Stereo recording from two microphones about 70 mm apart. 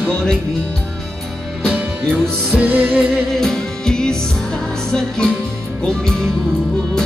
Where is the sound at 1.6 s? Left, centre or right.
Right.